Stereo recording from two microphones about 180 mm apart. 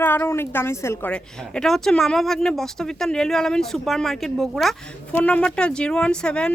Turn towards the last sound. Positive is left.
turn(degrees=5)  # may be behind; listen again after turning